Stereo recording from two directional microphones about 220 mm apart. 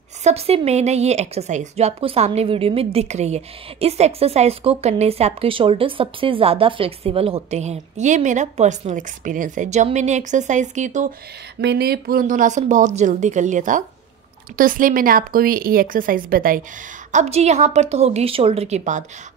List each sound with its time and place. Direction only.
0.2 s a woman's voice: 30° right (ahead or behind)
11.6 s a woman's voice: 45° right (ahead or behind)